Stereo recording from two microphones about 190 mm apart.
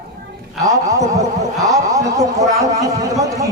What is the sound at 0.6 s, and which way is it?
Speech, 15° right (ahead or behind).